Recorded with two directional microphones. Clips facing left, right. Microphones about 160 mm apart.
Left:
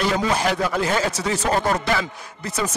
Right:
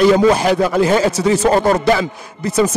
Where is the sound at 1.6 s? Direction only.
30° right (ahead or behind).